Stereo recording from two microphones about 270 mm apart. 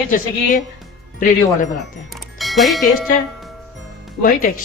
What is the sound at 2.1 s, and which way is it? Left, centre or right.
Bell, centre.